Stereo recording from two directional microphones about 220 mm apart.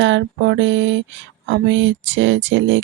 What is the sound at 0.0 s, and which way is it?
Speech, 55° right (ahead or behind).